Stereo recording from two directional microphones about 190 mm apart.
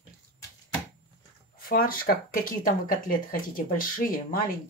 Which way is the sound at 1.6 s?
50° left (ahead or behind).